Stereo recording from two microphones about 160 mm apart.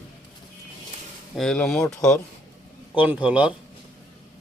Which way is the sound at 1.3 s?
5° left (ahead or behind).